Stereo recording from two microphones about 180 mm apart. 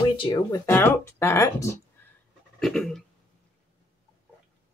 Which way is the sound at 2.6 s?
Centre (ahead or behind).